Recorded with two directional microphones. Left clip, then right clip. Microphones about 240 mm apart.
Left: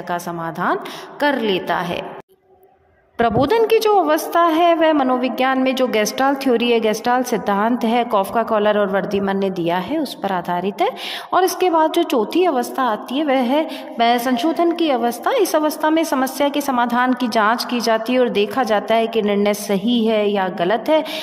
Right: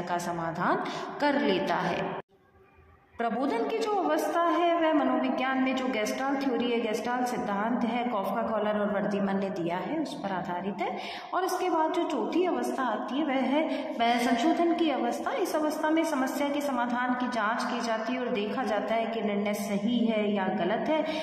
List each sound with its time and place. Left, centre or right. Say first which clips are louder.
0.1 s a woman's voice: left 8 dB; left
3.2 s a woman's voice: left 14 dB; left